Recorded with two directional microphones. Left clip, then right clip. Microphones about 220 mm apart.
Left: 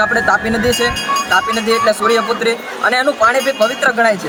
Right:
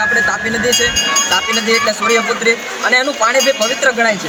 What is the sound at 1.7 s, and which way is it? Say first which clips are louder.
Speech: left 1 dB; 20° left (ahead or behind).